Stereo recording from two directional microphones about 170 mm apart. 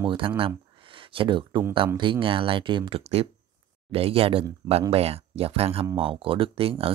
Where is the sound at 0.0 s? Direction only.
30° right (ahead or behind).